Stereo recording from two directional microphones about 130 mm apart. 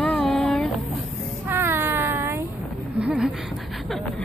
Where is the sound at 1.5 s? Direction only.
15° right (ahead or behind).